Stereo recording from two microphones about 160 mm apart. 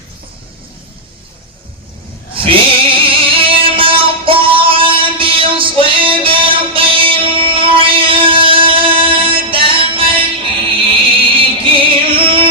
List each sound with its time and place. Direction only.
2.3 s music: 35° right (ahead or behind)